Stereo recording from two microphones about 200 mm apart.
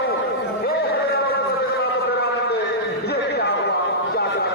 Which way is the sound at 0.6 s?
50° left (ahead or behind).